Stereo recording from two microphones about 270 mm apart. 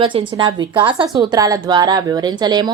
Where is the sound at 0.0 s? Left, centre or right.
Centre.